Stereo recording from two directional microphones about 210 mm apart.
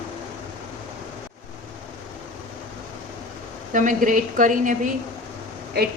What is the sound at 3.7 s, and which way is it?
A woman's voice, 40° right (ahead or behind).